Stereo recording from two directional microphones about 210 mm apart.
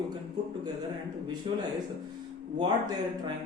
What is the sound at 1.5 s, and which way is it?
Speech, 25° right (ahead or behind).